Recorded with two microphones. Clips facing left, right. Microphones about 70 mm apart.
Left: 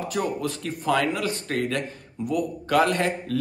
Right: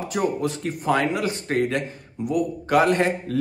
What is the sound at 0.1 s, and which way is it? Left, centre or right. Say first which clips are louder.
A man's voice: right 5 dB; centre.